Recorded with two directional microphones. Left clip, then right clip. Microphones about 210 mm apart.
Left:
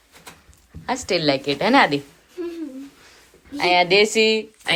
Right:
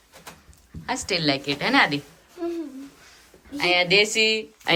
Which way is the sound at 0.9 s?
5° right (ahead or behind).